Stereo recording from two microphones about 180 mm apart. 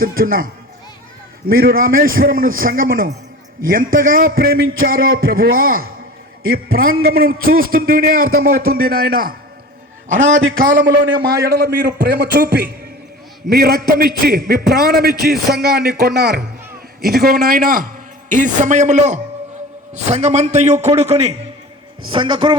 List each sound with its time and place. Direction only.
0.0 s a man's voice: 50° right (ahead or behind)
11.4 s a man's voice: 60° right (ahead or behind); by 22.5 s 25° right (ahead or behind)